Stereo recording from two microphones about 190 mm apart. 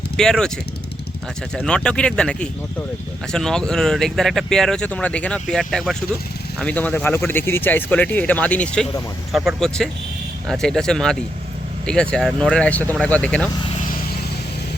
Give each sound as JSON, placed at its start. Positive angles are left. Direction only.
{"t": 0.2, "sound": "speech", "side_deg": 5}
{"t": 1.5, "sound": "speech", "side_deg": 5}